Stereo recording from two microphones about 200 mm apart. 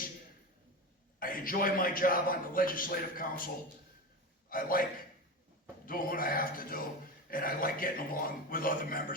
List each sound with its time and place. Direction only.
1.2 s a man's voice: 45° left (ahead or behind)